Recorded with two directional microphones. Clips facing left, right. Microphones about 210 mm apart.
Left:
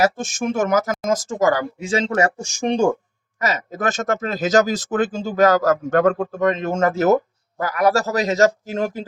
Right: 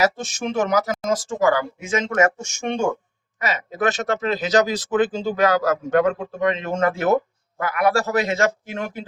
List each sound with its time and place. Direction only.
0.0 s speech: 50° left (ahead or behind)